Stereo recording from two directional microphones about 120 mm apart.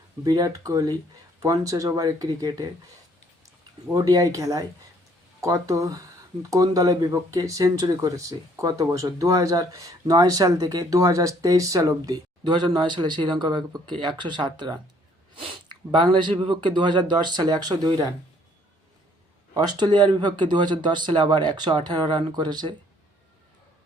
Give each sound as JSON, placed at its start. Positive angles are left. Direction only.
{"t": 0.3, "sound": "speech", "side_deg": -30}
{"t": 3.9, "sound": "speech", "side_deg": -30}
{"t": 19.5, "sound": "speech", "side_deg": -35}